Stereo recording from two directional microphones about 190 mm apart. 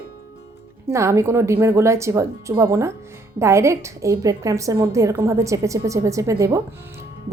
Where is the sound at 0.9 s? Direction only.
15° right (ahead or behind).